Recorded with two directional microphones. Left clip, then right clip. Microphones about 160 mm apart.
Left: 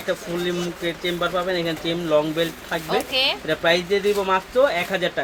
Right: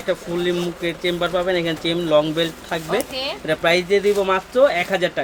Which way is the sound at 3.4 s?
45° right (ahead or behind).